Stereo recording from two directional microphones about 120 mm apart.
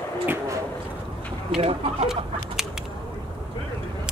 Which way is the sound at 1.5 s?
55° right (ahead or behind).